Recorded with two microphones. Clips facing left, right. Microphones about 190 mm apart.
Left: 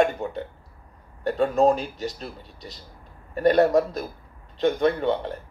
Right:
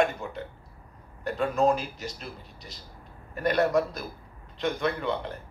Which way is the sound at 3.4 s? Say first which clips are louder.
Left 6 dB; 40° left (ahead or behind).